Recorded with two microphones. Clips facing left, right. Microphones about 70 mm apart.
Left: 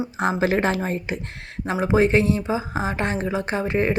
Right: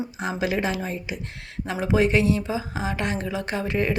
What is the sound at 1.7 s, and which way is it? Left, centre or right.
Speech, left.